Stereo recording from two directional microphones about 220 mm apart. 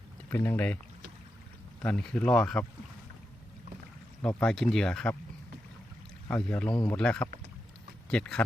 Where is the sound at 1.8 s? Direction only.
5° left (ahead or behind).